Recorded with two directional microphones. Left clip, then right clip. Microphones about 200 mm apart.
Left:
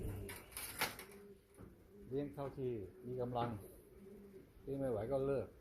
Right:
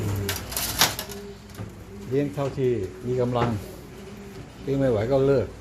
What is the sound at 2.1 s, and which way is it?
Speech, 10° right (ahead or behind).